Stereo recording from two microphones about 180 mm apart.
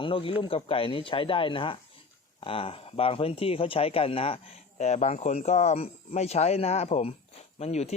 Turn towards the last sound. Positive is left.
turn(degrees=35)  # may be behind; listen again after turning